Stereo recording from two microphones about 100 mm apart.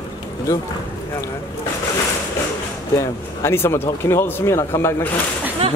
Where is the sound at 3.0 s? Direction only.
25° left (ahead or behind).